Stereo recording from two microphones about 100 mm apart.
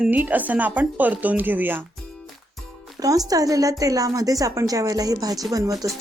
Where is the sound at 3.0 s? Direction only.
35° right (ahead or behind).